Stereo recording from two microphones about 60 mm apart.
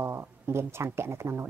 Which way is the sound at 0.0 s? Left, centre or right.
Right.